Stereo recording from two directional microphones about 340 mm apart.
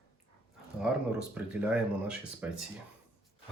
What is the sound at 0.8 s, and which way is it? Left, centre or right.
Speech, centre.